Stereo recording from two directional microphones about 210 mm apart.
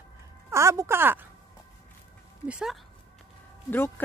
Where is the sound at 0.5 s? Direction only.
15° right (ahead or behind).